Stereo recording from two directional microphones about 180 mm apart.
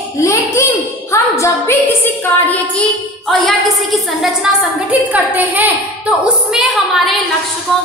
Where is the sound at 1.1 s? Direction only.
15° left (ahead or behind).